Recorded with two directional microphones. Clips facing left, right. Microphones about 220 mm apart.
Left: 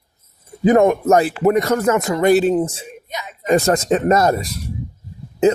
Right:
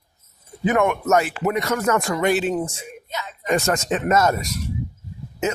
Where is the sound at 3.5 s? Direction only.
35° left (ahead or behind).